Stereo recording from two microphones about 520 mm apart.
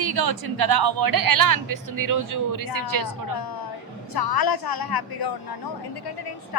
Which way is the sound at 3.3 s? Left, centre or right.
Left.